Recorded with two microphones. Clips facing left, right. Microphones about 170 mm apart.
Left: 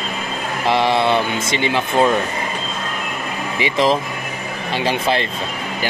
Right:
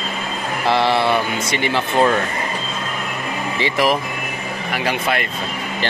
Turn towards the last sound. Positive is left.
turn(degrees=25)  # may be behind; listen again after turning